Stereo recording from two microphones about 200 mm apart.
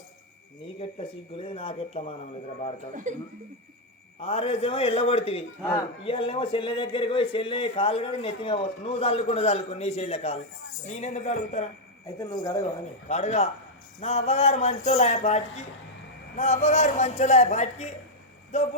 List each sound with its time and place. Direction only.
0.8 s speech: 30° left (ahead or behind)
2.9 s speech: 40° right (ahead or behind)
4.2 s a man's voice: 30° left (ahead or behind)
12.0 s speech: 20° left (ahead or behind)
13.1 s a man's voice: 35° left (ahead or behind)